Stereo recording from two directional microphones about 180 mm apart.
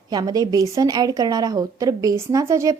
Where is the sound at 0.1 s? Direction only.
20° right (ahead or behind).